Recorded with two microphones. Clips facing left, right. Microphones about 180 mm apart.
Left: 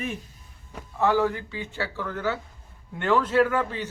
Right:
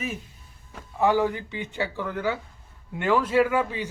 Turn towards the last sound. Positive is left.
turn(degrees=-10)  # may be behind; listen again after turning